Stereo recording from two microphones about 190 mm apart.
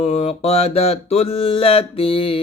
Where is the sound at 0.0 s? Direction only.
35° left (ahead or behind).